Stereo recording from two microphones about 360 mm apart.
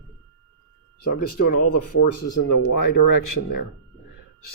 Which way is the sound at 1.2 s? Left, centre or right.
Left.